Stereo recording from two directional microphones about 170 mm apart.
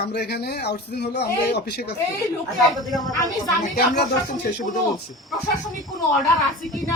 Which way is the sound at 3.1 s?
20° left (ahead or behind).